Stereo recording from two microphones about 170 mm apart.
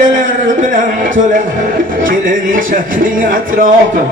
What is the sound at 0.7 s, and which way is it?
Speech, 50° right (ahead or behind).